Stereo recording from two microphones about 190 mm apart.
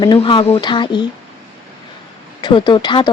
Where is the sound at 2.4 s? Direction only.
25° left (ahead or behind).